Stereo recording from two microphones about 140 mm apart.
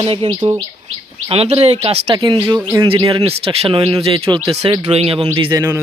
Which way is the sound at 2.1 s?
30° right (ahead or behind).